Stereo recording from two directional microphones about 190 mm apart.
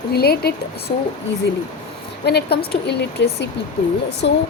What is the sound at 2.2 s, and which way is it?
A woman's voice, 60° left (ahead or behind).